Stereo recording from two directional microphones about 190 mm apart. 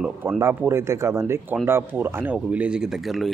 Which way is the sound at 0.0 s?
5° right (ahead or behind).